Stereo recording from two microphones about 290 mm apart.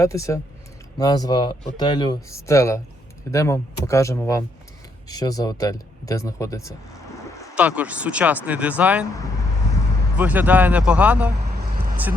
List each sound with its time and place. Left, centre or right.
0.0 s speech: centre
7.5 s speech: centre
10.2 s speech: centre
11.5 s vehicle: right